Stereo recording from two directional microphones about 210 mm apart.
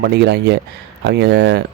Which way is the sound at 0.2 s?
50° right (ahead or behind).